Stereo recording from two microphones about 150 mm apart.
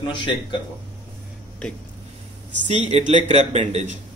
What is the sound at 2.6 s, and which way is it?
A man's voice, 50° right (ahead or behind).